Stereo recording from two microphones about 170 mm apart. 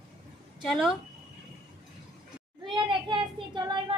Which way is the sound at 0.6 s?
Centre (ahead or behind).